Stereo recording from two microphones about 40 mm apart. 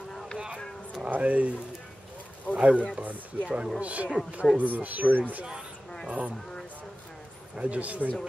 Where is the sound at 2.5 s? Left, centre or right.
Right.